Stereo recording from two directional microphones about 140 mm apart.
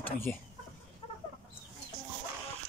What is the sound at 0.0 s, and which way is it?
Speech, 15° left (ahead or behind).